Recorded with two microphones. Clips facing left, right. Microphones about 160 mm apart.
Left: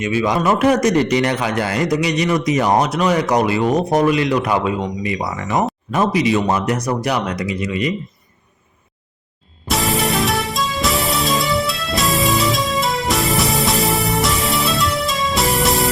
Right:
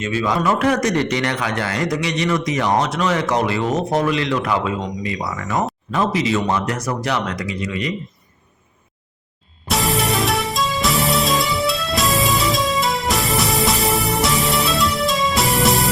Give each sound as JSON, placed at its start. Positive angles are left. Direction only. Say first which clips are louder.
{"t": 0.0, "sound": "a man's voice", "louder": "left 2 dB", "side_deg": 15}
{"t": 9.6, "sound": "music", "louder": "left 1 dB", "side_deg": 0}